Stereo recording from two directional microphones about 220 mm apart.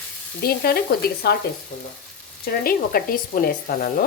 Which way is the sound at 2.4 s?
40° left (ahead or behind).